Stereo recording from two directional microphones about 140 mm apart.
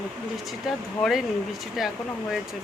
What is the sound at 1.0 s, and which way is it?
Speech, centre (ahead or behind).